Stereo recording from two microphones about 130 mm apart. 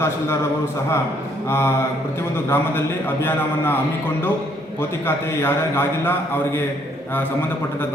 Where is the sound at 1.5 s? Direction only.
20° left (ahead or behind).